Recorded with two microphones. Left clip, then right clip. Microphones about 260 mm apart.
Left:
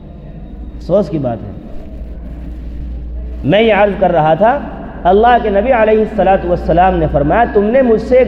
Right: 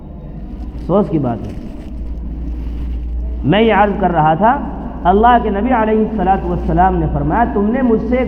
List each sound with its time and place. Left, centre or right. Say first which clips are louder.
0.9 s a man's voice: left 2 dB; left
3.4 s a man's voice: left 2 dB; left